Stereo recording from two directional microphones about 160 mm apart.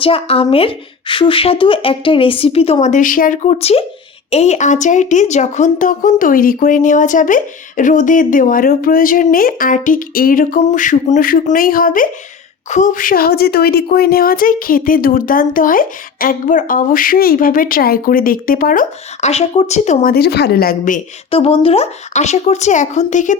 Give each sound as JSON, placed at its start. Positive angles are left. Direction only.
{"t": 0.0, "sound": "speech", "side_deg": 35}
{"t": 10.6, "sound": "speech", "side_deg": 50}
{"t": 19.3, "sound": "speech", "side_deg": 40}
{"t": 21.2, "sound": "speech", "side_deg": 35}